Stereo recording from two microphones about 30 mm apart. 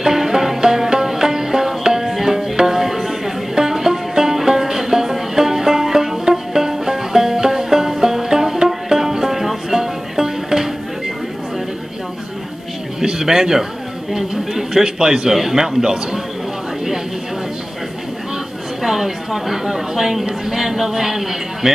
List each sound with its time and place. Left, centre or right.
0.0 s music: centre
13.0 s a sound: centre
14.5 s a man's voice: centre
18.8 s chatter: centre
20.2 s a man's voice: right